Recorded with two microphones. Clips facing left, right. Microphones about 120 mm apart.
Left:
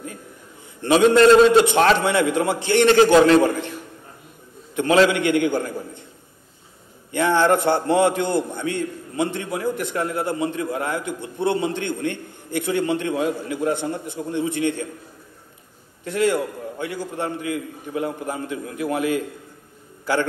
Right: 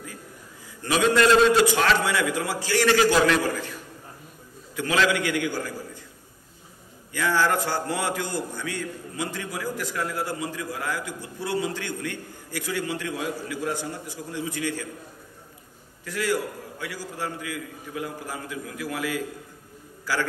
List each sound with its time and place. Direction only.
0.8 s a man's voice: 25° left (ahead or behind)
4.7 s a man's voice: 25° left (ahead or behind)
7.1 s a man's voice: 25° left (ahead or behind)
16.0 s a man's voice: 25° left (ahead or behind)